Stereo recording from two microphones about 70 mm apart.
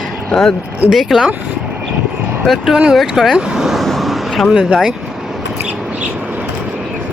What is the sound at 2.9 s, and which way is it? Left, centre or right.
Vehicle, centre.